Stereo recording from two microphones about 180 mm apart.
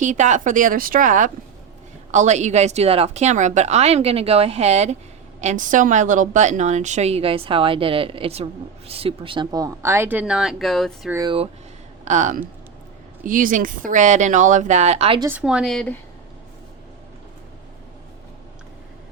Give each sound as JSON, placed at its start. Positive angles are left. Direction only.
{"t": 0.0, "sound": "a woman's voice", "side_deg": -45}
{"t": 12.0, "sound": "speech", "side_deg": -45}
{"t": 15.4, "sound": "a woman's voice", "side_deg": -5}